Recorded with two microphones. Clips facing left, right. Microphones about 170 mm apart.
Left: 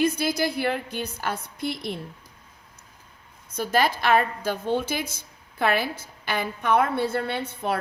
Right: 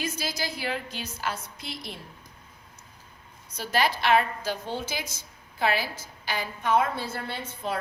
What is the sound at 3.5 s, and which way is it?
A woman's voice, 50° left (ahead or behind).